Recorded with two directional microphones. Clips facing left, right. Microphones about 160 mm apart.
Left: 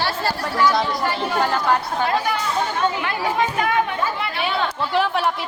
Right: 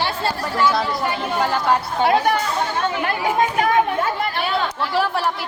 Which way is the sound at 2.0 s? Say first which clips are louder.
Right 4 dB; 70° right (ahead or behind).